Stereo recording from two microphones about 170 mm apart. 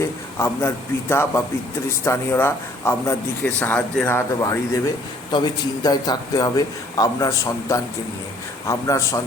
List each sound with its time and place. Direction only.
0.0 s a man's voice: 15° left (ahead or behind)